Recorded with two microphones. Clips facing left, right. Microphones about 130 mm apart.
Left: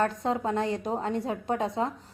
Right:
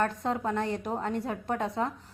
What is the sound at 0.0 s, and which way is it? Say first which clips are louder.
A woman's voice: left 2 dB; 25° left (ahead or behind).